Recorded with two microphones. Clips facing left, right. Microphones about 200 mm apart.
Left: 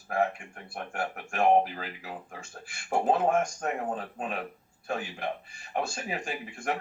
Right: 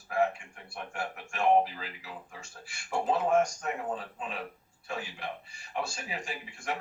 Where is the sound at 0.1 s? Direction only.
50° left (ahead or behind).